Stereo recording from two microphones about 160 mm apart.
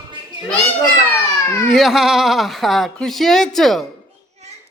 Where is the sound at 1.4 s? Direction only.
15° left (ahead or behind).